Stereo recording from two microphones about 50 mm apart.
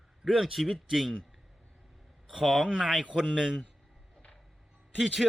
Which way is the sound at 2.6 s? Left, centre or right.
Centre.